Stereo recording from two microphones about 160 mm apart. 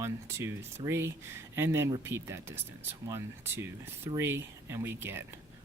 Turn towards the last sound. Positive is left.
turn(degrees=-15)  # may be behind; listen again after turning